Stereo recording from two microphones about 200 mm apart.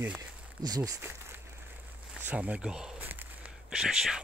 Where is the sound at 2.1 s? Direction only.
5° right (ahead or behind).